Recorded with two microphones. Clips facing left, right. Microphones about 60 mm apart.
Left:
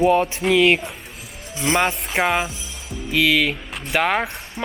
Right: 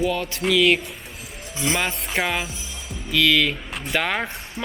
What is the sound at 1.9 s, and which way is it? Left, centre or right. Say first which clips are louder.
Speech: left 4 dB; centre.